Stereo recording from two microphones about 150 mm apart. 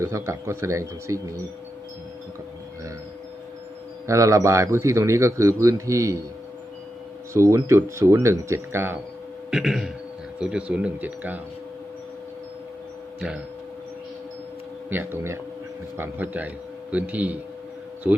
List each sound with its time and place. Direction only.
0.0 s a man's voice: 20° right (ahead or behind)
4.0 s a man's voice: 20° right (ahead or behind)
7.3 s a man's voice: 20° right (ahead or behind)
9.5 s speech: 5° right (ahead or behind)
13.1 s speech: 5° right (ahead or behind)
14.8 s speech: 15° right (ahead or behind)